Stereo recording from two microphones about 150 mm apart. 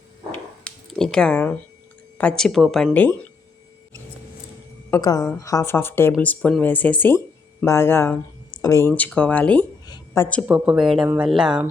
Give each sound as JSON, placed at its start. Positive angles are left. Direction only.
{"t": 0.3, "sound": "a sound", "side_deg": 5}
{"t": 2.1, "sound": "speech", "side_deg": 5}
{"t": 2.9, "sound": "a woman's voice", "side_deg": 10}
{"t": 4.9, "sound": "a woman's voice", "side_deg": 25}
{"t": 9.8, "sound": "a sound", "side_deg": 25}
{"t": 10.5, "sound": "speech", "side_deg": -5}